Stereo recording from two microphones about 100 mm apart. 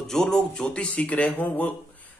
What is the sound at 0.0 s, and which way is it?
Speech, 5° left (ahead or behind).